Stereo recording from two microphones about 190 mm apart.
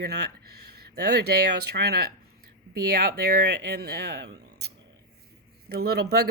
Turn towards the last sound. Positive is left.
turn(degrees=-60)  # may be behind; listen again after turning